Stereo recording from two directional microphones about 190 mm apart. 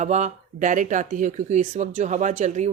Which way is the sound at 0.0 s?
35° right (ahead or behind).